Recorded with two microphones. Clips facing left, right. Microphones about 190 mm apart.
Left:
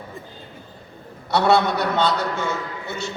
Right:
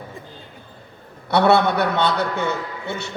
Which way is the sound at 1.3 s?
60° right (ahead or behind).